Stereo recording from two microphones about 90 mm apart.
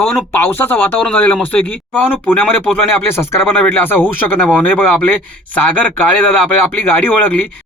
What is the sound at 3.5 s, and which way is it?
A man's voice, 20° left (ahead or behind).